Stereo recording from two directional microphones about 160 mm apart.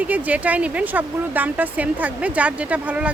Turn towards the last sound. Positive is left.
turn(degrees=-10)  # may be behind; listen again after turning